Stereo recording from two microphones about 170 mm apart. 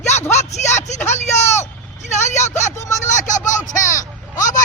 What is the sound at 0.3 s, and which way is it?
Speech, 40° left (ahead or behind).